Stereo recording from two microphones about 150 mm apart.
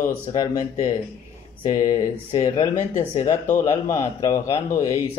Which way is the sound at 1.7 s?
25° left (ahead or behind).